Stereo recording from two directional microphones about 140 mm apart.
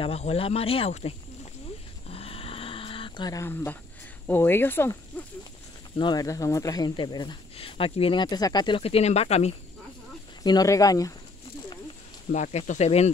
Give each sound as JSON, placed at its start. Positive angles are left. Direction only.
{"t": 0.0, "sound": "speech", "side_deg": 45}
{"t": 2.0, "sound": "dog", "side_deg": 45}
{"t": 3.3, "sound": "speech", "side_deg": 20}
{"t": 5.9, "sound": "speech", "side_deg": 30}
{"t": 10.4, "sound": "speech", "side_deg": 25}
{"t": 12.3, "sound": "speech", "side_deg": 60}